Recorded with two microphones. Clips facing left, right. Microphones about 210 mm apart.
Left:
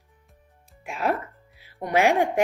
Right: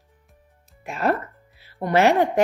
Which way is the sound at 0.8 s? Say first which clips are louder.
Right 3 dB; 10° left (ahead or behind).